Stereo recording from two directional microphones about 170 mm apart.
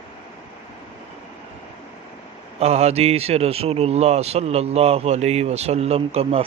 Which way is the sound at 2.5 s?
40° right (ahead or behind).